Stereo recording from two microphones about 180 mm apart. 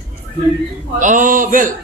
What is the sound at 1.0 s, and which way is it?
Speech, 45° right (ahead or behind).